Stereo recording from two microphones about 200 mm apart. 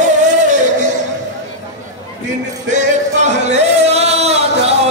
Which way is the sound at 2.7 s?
35° right (ahead or behind).